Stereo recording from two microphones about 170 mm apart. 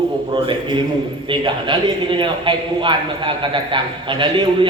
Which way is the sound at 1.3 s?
30° right (ahead or behind).